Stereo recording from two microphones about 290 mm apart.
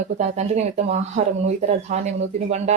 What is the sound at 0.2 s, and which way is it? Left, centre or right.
Speech, right.